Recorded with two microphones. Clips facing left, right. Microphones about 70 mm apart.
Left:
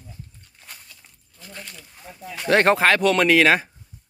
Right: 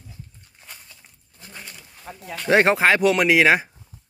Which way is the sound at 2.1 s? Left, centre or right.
Right.